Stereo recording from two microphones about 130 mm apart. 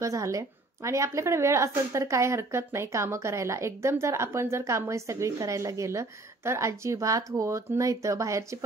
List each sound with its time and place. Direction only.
0.0 s a woman's voice: 25° right (ahead or behind)